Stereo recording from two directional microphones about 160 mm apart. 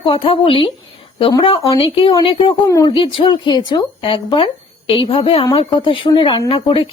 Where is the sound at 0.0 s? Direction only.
35° left (ahead or behind).